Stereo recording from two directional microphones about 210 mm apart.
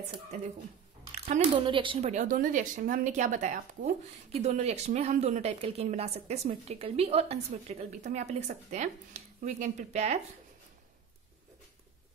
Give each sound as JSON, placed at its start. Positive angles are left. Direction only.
{"t": 1.1, "sound": "speech", "side_deg": -30}